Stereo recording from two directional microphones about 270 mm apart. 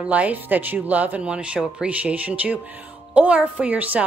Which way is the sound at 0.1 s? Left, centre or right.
Centre.